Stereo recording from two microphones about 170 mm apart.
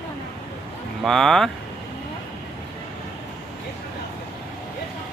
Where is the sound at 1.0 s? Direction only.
Centre (ahead or behind).